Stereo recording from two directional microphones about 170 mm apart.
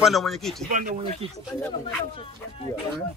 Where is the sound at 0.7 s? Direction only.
50° right (ahead or behind).